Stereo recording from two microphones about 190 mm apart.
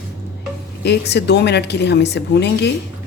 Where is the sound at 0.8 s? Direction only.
60° left (ahead or behind).